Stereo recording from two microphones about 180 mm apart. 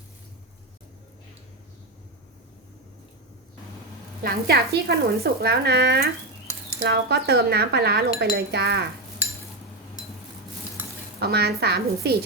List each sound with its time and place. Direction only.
4.2 s speech: 60° right (ahead or behind)
11.2 s speech: 60° right (ahead or behind)